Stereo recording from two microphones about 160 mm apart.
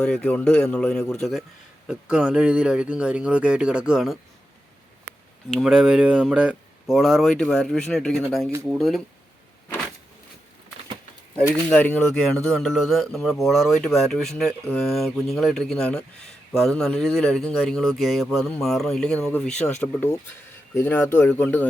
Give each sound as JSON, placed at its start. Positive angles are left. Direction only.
{"t": 0.0, "sound": "speech", "side_deg": 5}
{"t": 5.5, "sound": "speech", "side_deg": -5}
{"t": 11.7, "sound": "speech", "side_deg": 10}